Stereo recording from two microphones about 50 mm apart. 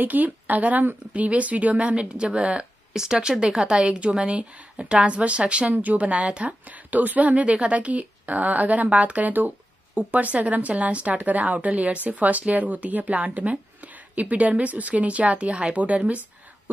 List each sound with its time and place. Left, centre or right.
0.0 s speech: right